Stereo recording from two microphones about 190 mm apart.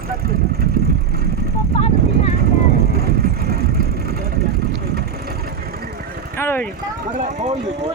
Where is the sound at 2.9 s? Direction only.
55° right (ahead or behind).